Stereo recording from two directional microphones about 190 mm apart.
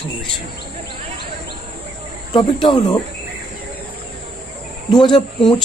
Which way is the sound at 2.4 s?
25° left (ahead or behind).